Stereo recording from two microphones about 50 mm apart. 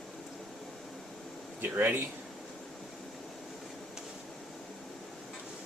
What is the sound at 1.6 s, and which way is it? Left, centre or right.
Speech, right.